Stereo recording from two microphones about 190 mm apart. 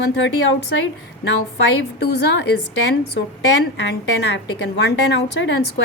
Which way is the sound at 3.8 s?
65° left (ahead or behind).